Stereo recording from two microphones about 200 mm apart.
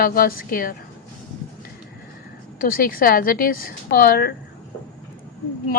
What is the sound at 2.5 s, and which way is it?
A woman's voice, 45° left (ahead or behind).